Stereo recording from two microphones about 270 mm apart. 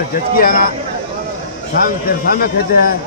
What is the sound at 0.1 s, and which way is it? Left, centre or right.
Speech, left.